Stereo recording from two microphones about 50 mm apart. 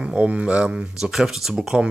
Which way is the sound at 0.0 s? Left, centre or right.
Right.